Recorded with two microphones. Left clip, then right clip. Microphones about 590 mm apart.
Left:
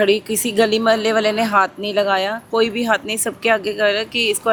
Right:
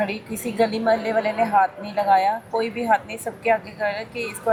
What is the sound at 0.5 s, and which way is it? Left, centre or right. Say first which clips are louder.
Speech: left 4 dB; left.